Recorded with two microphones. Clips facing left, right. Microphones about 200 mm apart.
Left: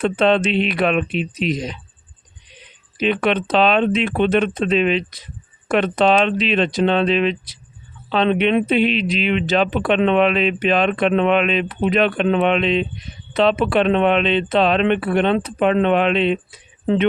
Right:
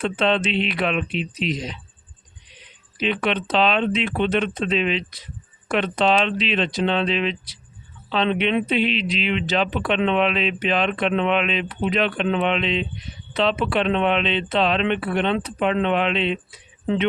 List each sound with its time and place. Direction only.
0.0 s speech: 50° left (ahead or behind)
3.0 s speech: 50° left (ahead or behind)